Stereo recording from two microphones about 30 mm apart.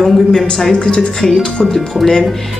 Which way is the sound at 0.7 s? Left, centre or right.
Left.